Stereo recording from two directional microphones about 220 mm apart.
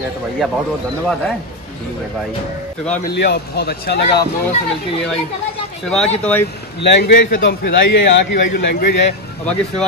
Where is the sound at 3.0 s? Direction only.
50° left (ahead or behind).